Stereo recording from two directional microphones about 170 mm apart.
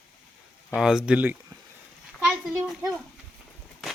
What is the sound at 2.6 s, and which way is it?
Speech, centre (ahead or behind).